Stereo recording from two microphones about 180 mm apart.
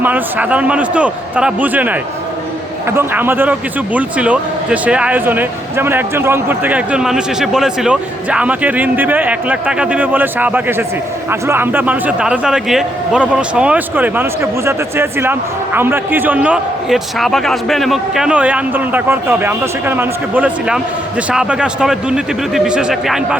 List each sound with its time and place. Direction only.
0.0 s a man's voice: 10° right (ahead or behind)